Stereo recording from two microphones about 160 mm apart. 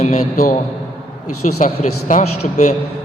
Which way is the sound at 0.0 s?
55° left (ahead or behind).